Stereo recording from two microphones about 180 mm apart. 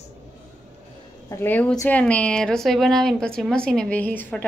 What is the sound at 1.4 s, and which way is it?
Speech, 10° left (ahead or behind).